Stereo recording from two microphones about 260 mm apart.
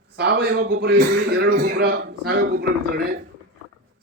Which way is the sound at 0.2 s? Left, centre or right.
Right.